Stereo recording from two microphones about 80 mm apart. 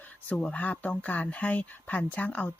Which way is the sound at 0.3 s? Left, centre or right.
Centre.